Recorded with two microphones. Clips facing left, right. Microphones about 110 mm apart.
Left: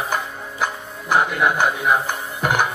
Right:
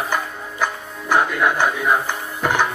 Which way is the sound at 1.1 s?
15° left (ahead or behind).